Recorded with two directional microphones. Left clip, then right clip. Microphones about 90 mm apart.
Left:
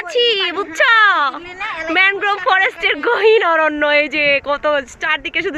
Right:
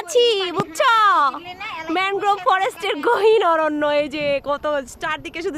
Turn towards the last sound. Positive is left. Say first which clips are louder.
# left 7 dB
turn(degrees=-15)  # may be behind; listen again after turning